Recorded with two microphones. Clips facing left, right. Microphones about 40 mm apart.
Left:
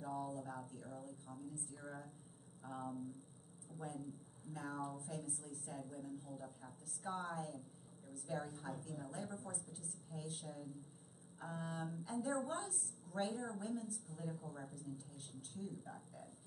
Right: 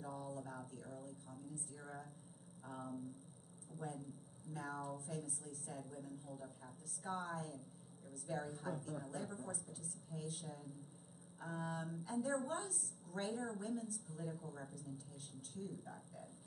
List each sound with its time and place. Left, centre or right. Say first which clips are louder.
0.0 s a sound: left 3 dB; centre
0.7 s a woman's voice: even; centre
1.7 s a woman's voice: left 1 dB; centre
4.5 s a woman's voice: even; centre
15.5 s a woman's voice: even; centre